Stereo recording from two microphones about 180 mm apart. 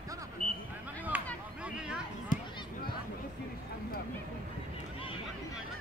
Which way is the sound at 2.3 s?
45° left (ahead or behind).